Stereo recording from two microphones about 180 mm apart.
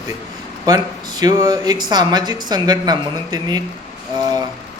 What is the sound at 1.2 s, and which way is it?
A man's voice, 20° right (ahead or behind).